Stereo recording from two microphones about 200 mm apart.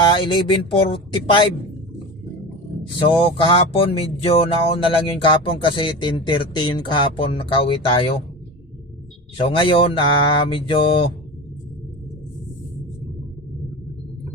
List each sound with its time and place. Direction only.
0.0 s speech: 25° left (ahead or behind)
3.0 s speech: 25° left (ahead or behind)
9.4 s speech: 25° left (ahead or behind)